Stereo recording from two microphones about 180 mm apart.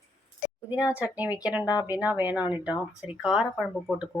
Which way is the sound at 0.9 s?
10° right (ahead or behind).